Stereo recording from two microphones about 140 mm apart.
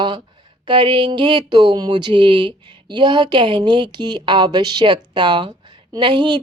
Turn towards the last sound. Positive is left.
turn(degrees=-35)  # may be behind; listen again after turning